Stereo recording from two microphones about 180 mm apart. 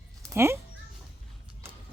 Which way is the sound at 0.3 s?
15° right (ahead or behind).